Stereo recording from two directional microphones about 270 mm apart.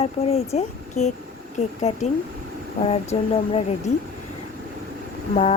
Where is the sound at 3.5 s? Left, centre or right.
Left.